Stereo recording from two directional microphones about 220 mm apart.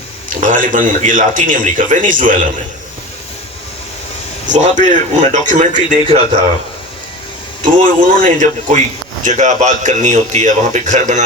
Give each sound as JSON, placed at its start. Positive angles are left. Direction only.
{"t": 0.3, "sound": "a man's voice", "side_deg": -35}
{"t": 4.4, "sound": "a man's voice", "side_deg": -35}
{"t": 7.6, "sound": "a man's voice", "side_deg": -40}